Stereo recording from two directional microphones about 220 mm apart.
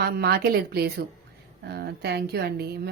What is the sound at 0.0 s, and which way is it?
A woman's voice, 45° right (ahead or behind).